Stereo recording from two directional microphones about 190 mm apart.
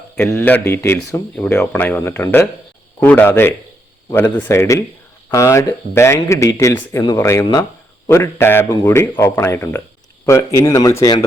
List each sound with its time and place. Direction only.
0.3 s speech: 10° left (ahead or behind)